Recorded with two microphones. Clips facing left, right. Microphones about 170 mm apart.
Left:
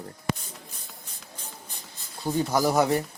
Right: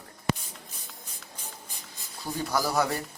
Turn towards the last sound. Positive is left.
turn(degrees=20)  # may be behind; listen again after turning